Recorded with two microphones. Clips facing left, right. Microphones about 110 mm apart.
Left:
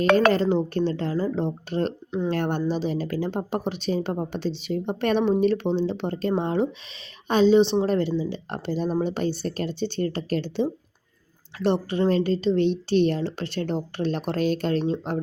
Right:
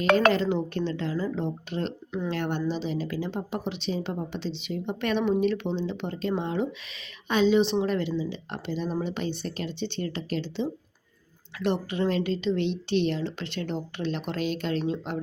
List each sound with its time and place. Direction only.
0.0 s a woman's voice: 40° left (ahead or behind)
11.6 s a woman's voice: 35° left (ahead or behind)